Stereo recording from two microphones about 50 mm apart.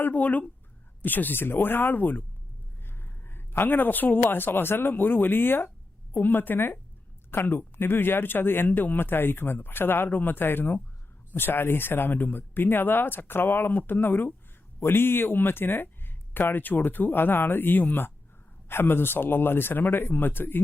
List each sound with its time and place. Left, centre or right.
0.0 s speech: left
2.8 s speech: left